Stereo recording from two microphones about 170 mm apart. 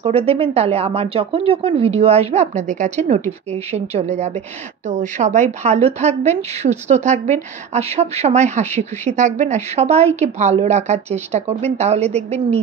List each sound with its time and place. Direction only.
0.0 s a woman's voice: 35° right (ahead or behind)